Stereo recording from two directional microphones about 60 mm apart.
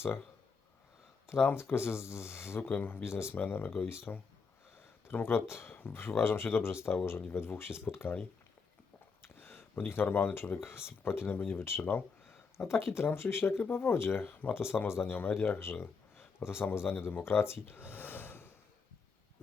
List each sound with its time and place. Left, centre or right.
1.3 s speech: left
3.0 s speech: left
3.3 s speech: left
9.2 s a sound: left
9.8 s speech: left
14.5 s speech: left